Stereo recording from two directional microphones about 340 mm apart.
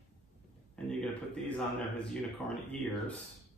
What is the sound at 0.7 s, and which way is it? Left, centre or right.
Speech, centre.